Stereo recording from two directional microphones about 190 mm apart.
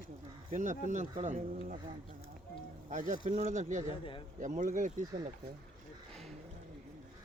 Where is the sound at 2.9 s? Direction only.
40° right (ahead or behind).